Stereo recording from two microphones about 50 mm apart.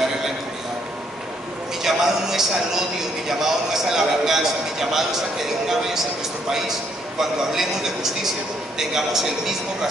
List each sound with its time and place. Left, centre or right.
1.8 s speech: centre
7.2 s speech: centre